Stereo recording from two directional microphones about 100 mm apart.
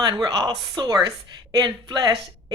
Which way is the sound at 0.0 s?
45° right (ahead or behind).